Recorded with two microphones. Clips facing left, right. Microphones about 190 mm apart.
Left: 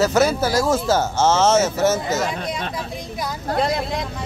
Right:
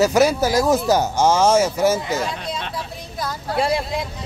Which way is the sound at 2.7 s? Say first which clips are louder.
Left 2 dB; 15° left (ahead or behind).